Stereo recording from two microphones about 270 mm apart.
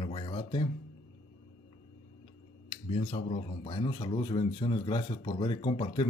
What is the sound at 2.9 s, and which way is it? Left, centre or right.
Speech, left.